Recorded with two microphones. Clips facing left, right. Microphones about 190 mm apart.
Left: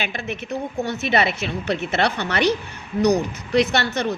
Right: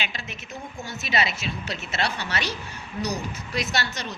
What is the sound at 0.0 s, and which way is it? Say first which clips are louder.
A woman's voice: left 8 dB; 55° left (ahead or behind).